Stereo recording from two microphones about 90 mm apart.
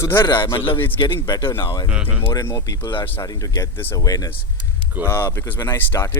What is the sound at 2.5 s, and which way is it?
A man's voice, 45° left (ahead or behind).